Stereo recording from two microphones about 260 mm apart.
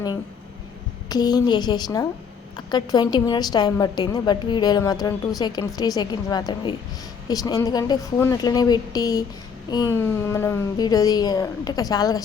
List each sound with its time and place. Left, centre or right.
1.1 s a woman's voice: centre